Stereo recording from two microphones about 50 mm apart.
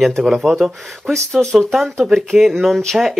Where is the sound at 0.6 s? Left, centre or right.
Centre.